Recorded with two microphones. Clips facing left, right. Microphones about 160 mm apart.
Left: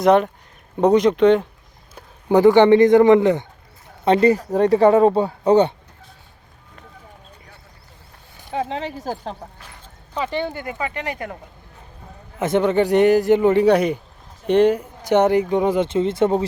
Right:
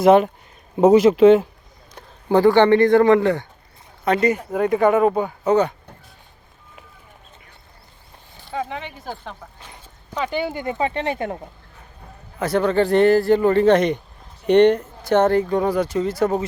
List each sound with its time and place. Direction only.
0.0 s speech: 5° right (ahead or behind)
2.0 s speech: 15° left (ahead or behind)
4.0 s speech: 30° left (ahead or behind)
8.4 s a sound: 15° left (ahead or behind)
8.7 s speech: 35° left (ahead or behind)
10.2 s speech: centre (ahead or behind)
10.5 s speech: 25° right (ahead or behind)
12.4 s a man's voice: 20° left (ahead or behind); by 14.8 s 5° left (ahead or behind)
15.0 s speech: 15° left (ahead or behind)